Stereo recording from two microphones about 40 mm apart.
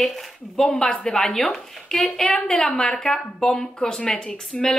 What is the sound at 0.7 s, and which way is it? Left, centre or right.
Speech, centre.